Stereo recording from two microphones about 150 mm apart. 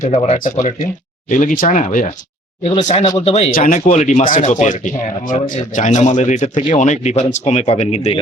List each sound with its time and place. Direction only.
0.0 s speech: 50° left (ahead or behind)
0.3 s speech: 60° left (ahead or behind); by 3.5 s 45° left (ahead or behind)
3.5 s speech: 60° left (ahead or behind)